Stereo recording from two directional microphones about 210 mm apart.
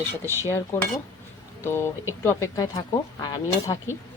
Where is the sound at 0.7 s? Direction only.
10° left (ahead or behind).